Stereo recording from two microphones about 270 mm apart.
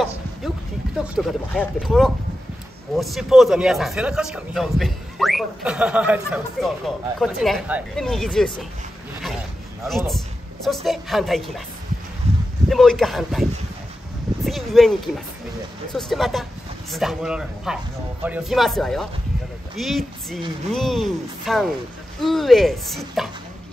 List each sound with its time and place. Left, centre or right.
0.9 s speech: centre
9.8 s speech: centre
12.2 s a sound: right
12.6 s speech: centre